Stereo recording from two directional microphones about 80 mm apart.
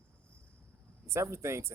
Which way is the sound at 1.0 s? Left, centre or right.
Right.